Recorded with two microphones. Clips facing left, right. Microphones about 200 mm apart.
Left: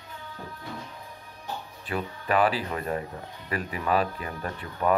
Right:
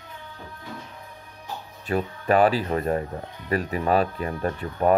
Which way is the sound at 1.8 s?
40° right (ahead or behind).